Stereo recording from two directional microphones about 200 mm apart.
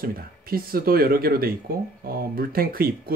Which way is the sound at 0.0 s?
45° right (ahead or behind).